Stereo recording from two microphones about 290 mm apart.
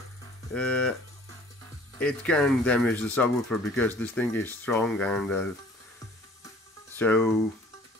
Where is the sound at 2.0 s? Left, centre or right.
Centre.